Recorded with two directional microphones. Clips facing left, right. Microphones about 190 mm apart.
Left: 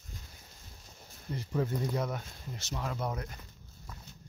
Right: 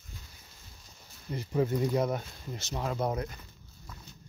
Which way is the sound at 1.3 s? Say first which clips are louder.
Right 4 dB; 10° right (ahead or behind).